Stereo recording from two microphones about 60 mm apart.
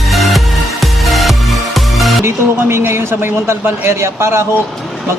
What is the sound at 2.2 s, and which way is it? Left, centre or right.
A man's voice, right.